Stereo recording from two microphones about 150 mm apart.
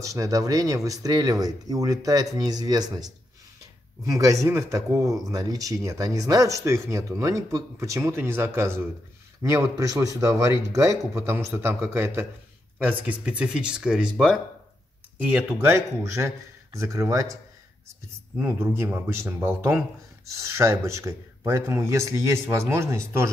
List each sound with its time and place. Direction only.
0.0 s speech: 20° right (ahead or behind)
18.4 s speech: 15° right (ahead or behind)